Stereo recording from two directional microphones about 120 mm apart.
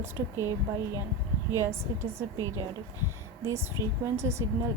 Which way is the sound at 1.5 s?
25° right (ahead or behind).